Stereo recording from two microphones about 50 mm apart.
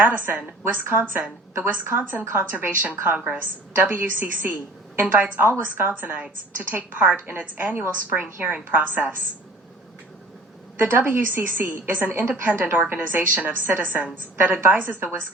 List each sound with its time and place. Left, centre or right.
0.7 s a woman's voice: right
10.8 s a woman's voice: right